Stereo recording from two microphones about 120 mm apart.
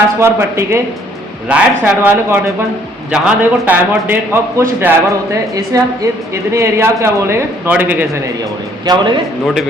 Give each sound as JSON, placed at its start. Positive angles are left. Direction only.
{"t": 0.2, "sound": "a man's voice", "side_deg": -20}
{"t": 1.5, "sound": "a man's voice", "side_deg": -10}
{"t": 8.9, "sound": "a man's voice", "side_deg": -35}